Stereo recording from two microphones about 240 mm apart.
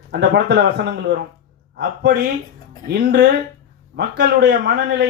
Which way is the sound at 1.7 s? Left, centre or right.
Right.